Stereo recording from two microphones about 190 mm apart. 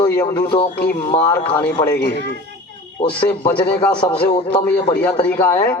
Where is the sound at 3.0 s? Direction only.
25° left (ahead or behind).